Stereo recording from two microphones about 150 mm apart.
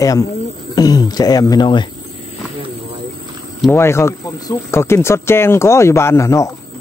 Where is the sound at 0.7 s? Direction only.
25° left (ahead or behind).